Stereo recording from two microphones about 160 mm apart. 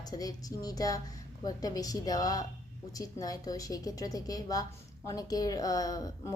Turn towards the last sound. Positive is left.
turn(degrees=25)  # may be behind; listen again after turning